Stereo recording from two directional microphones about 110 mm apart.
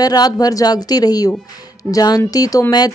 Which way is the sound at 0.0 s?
35° left (ahead or behind).